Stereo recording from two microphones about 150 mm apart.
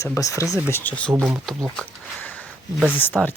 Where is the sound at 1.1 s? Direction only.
15° right (ahead or behind).